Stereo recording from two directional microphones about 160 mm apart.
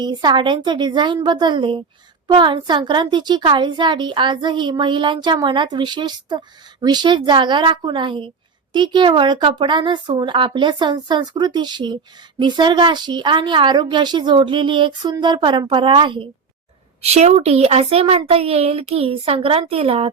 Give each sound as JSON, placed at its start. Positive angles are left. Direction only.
{"t": 0.0, "sound": "a woman's voice", "side_deg": -25}
{"t": 17.0, "sound": "a woman's voice", "side_deg": -40}